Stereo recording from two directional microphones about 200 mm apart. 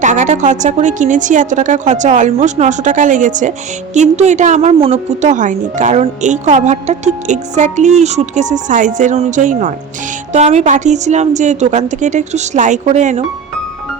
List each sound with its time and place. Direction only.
0.0 s a woman's voice: 35° right (ahead or behind)